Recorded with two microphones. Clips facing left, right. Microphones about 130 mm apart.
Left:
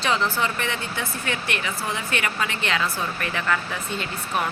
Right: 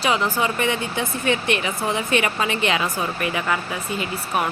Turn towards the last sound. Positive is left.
turn(degrees=-15)  # may be behind; listen again after turning